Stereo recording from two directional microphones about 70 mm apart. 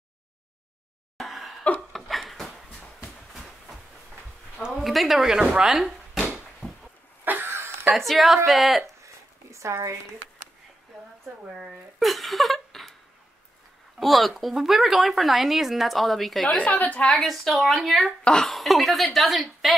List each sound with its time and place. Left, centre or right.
1.1 s a sound: centre
5.6 s speech: centre
7.2 s a sound: right
7.9 s speech: centre
8.8 s a sound: right
11.5 s speech: centre
13.9 s speech: centre
16.5 s a woman's voice: left
17.0 s speech: centre
18.2 s a woman's voice: centre
18.5 s speech: centre